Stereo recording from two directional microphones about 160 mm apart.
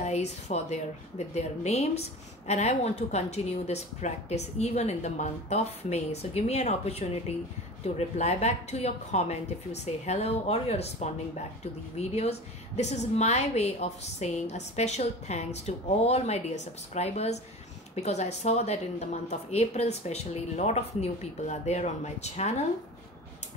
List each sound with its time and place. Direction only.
0.0 s speech: 45° left (ahead or behind)